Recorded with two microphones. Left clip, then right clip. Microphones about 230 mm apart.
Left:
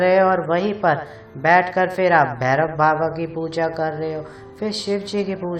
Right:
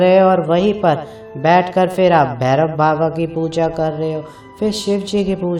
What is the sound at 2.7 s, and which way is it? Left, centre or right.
Mantra, right.